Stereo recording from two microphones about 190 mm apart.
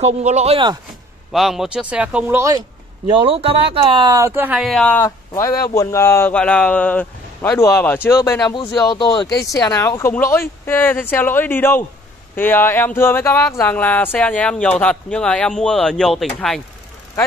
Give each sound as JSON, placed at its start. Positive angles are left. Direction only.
{"t": 0.0, "sound": "speech", "side_deg": -35}
{"t": 1.3, "sound": "speech", "side_deg": 0}
{"t": 3.1, "sound": "speech", "side_deg": -30}
{"t": 9.3, "sound": "speech", "side_deg": 60}
{"t": 9.6, "sound": "speech", "side_deg": 15}